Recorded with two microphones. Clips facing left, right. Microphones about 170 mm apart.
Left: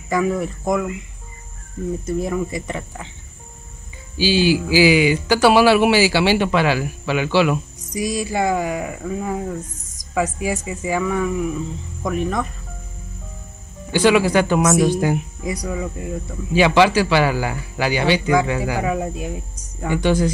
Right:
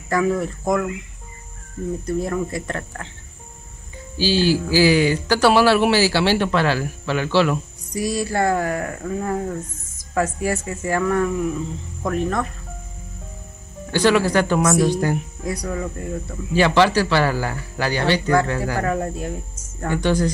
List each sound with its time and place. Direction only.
0.1 s speech: 5° left (ahead or behind)
2.2 s speech: 5° left (ahead or behind)
4.2 s speech: 15° left (ahead or behind)
13.9 s speech: 10° left (ahead or behind)